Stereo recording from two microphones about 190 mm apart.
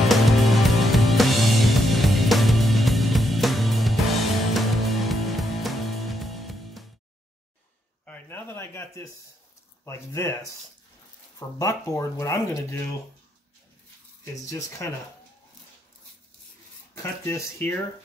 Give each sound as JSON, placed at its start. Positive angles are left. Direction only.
{"t": 0.1, "sound": "music", "side_deg": 0}
{"t": 8.0, "sound": "a sound", "side_deg": 10}
{"t": 9.8, "sound": "speech", "side_deg": 15}
{"t": 14.2, "sound": "speech", "side_deg": 15}
{"t": 17.3, "sound": "speech", "side_deg": 10}